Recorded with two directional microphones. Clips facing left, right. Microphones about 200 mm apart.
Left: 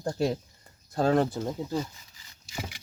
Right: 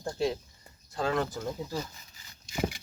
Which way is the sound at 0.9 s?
40° left (ahead or behind).